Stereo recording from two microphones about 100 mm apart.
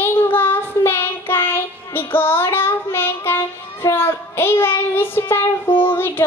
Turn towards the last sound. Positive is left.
turn(degrees=25)  # may be behind; listen again after turning